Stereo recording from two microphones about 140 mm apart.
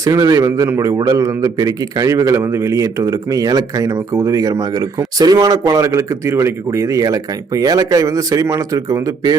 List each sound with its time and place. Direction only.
0.0 s a man's voice: 25° right (ahead or behind)